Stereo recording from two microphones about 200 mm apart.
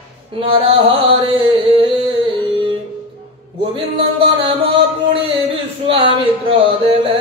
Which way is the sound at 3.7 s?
25° right (ahead or behind).